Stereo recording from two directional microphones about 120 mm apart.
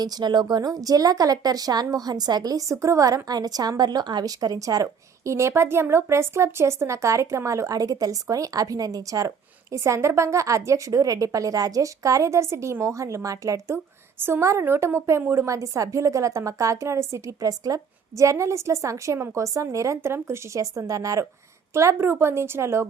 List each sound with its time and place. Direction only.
0.0 s a woman's voice: 35° right (ahead or behind)